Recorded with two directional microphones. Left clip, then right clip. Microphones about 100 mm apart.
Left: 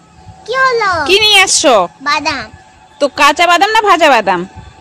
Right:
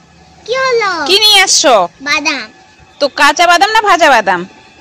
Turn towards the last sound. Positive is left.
turn(degrees=40)  # may be behind; listen again after turning